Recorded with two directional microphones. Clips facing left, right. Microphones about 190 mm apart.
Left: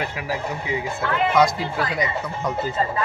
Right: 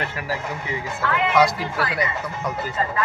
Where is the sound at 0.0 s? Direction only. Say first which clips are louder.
Left 1 dB; 15° left (ahead or behind).